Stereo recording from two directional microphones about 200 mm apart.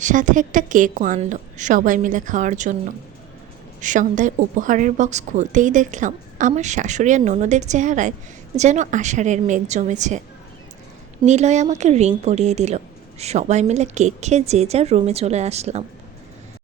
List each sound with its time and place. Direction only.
0.0 s a woman's voice: 40° right (ahead or behind)
3.8 s a woman's voice: 40° right (ahead or behind)
11.3 s a woman's voice: 35° right (ahead or behind)